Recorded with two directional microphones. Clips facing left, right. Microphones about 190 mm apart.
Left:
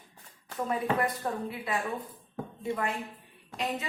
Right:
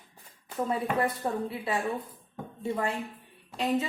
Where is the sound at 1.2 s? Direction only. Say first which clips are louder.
Right 2 dB; 25° right (ahead or behind).